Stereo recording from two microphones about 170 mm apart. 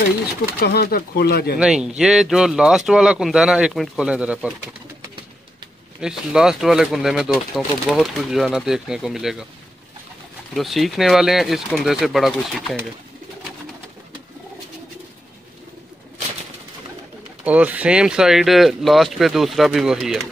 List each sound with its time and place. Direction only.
0.6 s speech: 65° left (ahead or behind)
1.6 s speech: 5° right (ahead or behind)
5.9 s speech: 5° right (ahead or behind)
10.5 s speech: centre (ahead or behind)
17.5 s speech: 10° right (ahead or behind)